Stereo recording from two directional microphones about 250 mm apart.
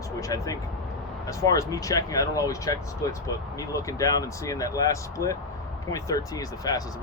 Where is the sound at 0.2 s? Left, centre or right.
Centre.